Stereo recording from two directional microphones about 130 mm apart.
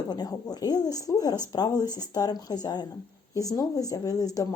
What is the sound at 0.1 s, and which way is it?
Speech, 30° left (ahead or behind).